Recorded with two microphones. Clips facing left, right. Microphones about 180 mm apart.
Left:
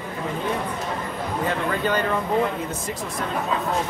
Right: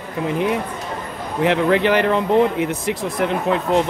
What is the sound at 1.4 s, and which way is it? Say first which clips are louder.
Speech: right 9 dB; 80° right.